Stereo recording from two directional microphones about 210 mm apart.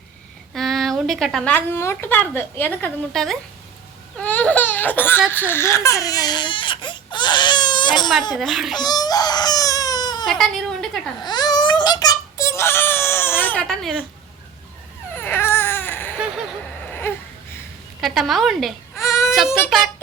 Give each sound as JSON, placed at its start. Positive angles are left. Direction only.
{"t": 0.5, "sound": "speech", "side_deg": 0}
{"t": 4.2, "sound": "baby cry", "side_deg": 5}
{"t": 5.3, "sound": "speech", "side_deg": 10}
{"t": 8.4, "sound": "speech", "side_deg": 0}
{"t": 8.7, "sound": "baby cry", "side_deg": 20}
{"t": 10.2, "sound": "speech", "side_deg": 0}
{"t": 11.2, "sound": "baby cry", "side_deg": 20}
{"t": 15.1, "sound": "baby cry", "side_deg": 10}
{"t": 17.1, "sound": "a sound", "side_deg": 10}
{"t": 18.0, "sound": "speech", "side_deg": 0}
{"t": 19.0, "sound": "baby cry", "side_deg": 15}